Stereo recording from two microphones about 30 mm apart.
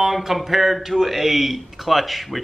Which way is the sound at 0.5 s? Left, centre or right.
Centre.